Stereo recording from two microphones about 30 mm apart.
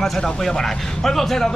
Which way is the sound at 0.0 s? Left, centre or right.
Centre.